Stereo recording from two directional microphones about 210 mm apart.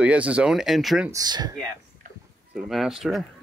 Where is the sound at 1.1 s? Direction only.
20° right (ahead or behind).